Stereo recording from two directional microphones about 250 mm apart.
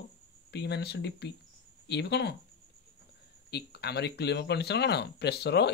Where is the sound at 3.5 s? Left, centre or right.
Left.